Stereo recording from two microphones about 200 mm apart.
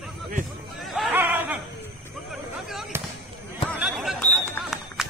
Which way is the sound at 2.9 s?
10° right (ahead or behind).